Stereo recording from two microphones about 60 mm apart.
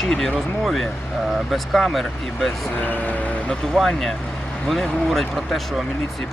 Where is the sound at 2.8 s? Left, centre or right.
Left.